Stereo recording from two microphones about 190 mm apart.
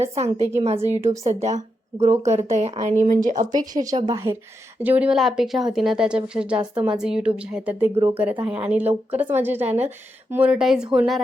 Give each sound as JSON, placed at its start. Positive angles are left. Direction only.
{"t": 0.0, "sound": "a woman's voice", "side_deg": -35}
{"t": 3.8, "sound": "a woman's voice", "side_deg": -20}